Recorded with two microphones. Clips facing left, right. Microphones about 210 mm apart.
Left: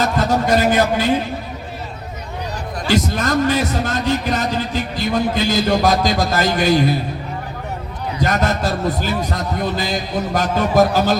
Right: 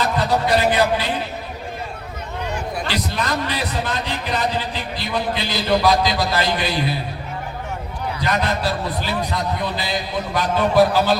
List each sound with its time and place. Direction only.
0.0 s a sound: 45° left (ahead or behind)
2.9 s a man's voice: 45° left (ahead or behind)
8.2 s a man's voice: 45° left (ahead or behind)